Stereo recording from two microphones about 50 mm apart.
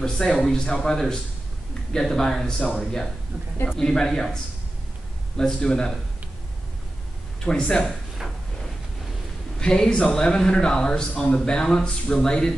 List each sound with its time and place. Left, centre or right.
0.0 s speech: centre
5.4 s speech: centre
7.4 s speech: centre
9.6 s speech: centre